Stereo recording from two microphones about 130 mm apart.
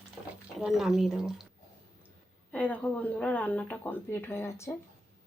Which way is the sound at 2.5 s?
10° left (ahead or behind).